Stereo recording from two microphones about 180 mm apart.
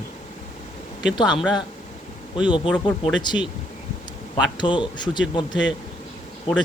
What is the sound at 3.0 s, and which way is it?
Speech, 25° left (ahead or behind).